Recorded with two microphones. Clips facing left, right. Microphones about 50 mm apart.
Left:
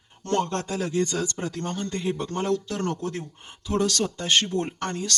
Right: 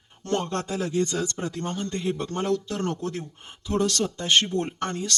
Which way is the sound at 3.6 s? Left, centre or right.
Centre.